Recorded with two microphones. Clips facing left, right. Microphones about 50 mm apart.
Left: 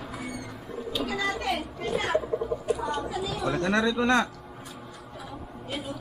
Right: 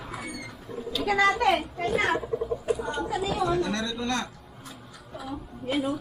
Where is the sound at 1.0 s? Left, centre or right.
Right.